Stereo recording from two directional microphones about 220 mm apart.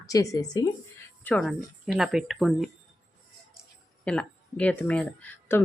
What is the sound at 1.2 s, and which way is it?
Speech, centre (ahead or behind).